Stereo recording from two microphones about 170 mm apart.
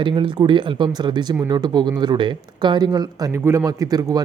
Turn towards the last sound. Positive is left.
turn(degrees=-20)  # may be behind; listen again after turning